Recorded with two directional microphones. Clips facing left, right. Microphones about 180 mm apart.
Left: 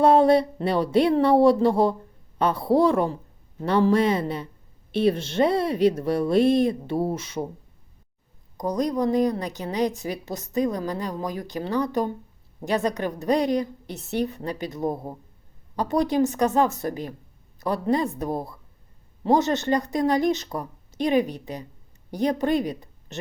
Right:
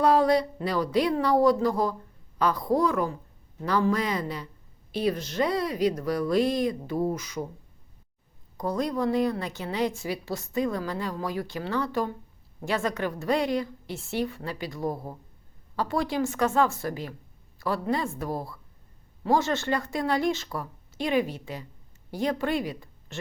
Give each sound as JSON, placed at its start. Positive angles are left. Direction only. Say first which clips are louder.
{"t": 0.0, "sound": "speech", "louder": "left 4 dB", "side_deg": 25}
{"t": 8.5, "sound": "a woman's voice", "louder": "left 3 dB", "side_deg": 15}